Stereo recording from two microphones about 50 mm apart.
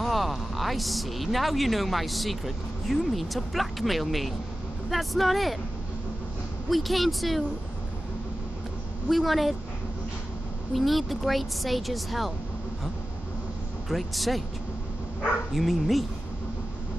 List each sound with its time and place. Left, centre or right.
0.0 s speech: centre
6.7 s speech: centre
9.1 s speech: centre
10.7 s speech: centre
13.8 s speech: centre
15.5 s speech: centre